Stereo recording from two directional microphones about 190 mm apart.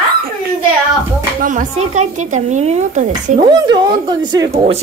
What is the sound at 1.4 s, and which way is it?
Speech, 40° right (ahead or behind).